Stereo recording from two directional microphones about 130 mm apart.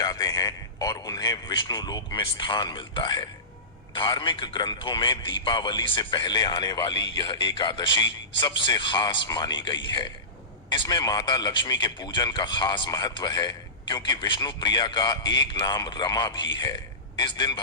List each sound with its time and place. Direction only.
0.0 s a man's voice: 30° left (ahead or behind)